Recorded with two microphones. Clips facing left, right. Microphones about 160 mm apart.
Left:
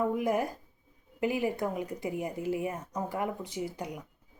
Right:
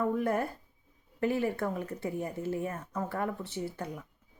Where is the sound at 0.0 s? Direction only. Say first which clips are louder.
Left 1 dB; 15° left (ahead or behind).